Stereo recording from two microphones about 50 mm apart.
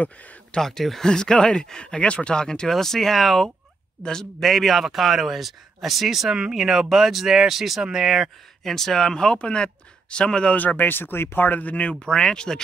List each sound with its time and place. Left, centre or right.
0.0 s speech: left
0.6 s a man's voice: centre
8.6 s speech: centre
10.5 s speech: left; by 12.6 s centre